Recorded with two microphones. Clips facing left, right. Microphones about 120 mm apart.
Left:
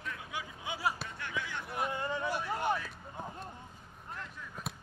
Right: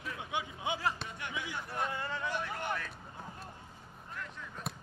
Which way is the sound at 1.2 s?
15° right (ahead or behind).